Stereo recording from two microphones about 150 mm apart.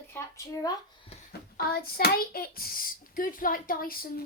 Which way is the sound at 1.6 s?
90° left.